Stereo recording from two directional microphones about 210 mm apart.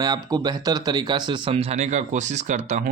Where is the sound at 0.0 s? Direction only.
20° right (ahead or behind).